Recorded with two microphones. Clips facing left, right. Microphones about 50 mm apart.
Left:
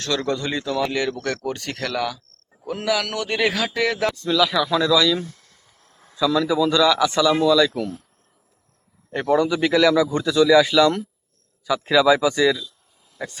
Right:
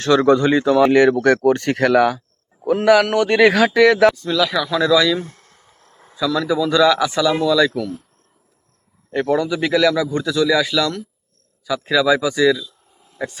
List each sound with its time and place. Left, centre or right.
0.0 s speech: right
4.2 s speech: centre
4.8 s speech: centre
5.2 s a sound: right
6.1 s speech: centre
9.1 s speech: centre
13.1 s speech: centre